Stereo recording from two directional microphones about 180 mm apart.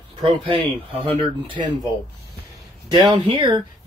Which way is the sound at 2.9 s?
25° right (ahead or behind).